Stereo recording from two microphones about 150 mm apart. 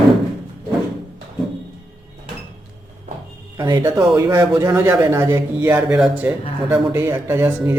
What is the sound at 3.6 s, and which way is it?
A man's voice, 25° right (ahead or behind).